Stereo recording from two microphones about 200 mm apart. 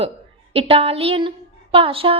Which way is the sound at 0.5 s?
30° right (ahead or behind).